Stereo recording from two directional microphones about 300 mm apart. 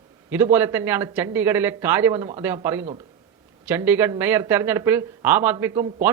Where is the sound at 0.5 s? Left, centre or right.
Centre.